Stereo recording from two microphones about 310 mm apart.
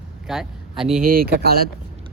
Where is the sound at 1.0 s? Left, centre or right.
Right.